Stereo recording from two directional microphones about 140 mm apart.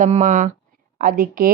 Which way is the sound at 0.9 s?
75° right (ahead or behind).